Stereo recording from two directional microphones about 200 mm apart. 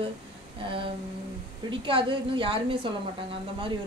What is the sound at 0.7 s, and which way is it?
A woman's voice, 25° right (ahead or behind).